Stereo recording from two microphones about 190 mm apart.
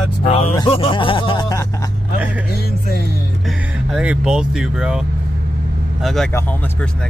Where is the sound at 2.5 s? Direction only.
55° left (ahead or behind).